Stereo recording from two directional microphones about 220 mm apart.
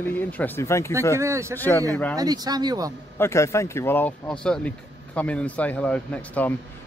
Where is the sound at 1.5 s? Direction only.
10° left (ahead or behind).